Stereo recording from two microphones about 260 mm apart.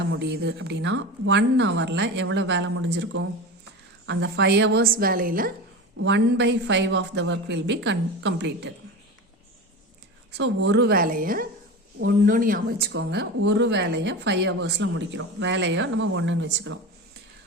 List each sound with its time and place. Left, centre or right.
0.1 s a woman's voice: right
10.3 s a woman's voice: right
12.9 s speech: right